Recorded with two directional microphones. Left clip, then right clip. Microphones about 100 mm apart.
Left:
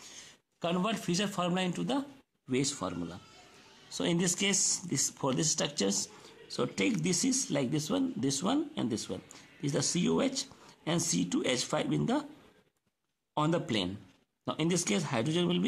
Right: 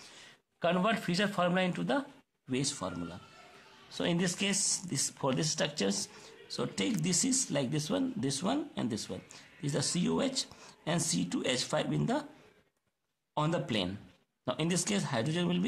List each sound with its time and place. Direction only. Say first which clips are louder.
0.6 s speech: right 3 dB; 30° left (ahead or behind)
13.3 s speech: left 2 dB; 15° left (ahead or behind)
13.7 s speech: left 1 dB; 25° left (ahead or behind)